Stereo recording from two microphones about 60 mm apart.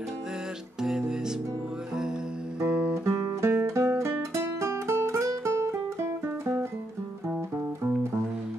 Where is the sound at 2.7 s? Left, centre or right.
Right.